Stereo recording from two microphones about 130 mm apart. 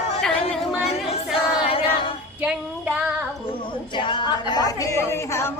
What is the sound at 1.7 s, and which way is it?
Female singing, 45° left (ahead or behind).